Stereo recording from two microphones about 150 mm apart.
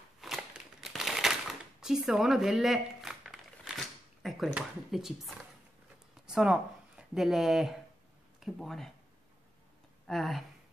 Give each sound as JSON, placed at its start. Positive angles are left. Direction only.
{"t": 0.2, "sound": "a sound", "side_deg": 0}
{"t": 6.2, "sound": "speech", "side_deg": -5}
{"t": 10.0, "sound": "speech", "side_deg": 0}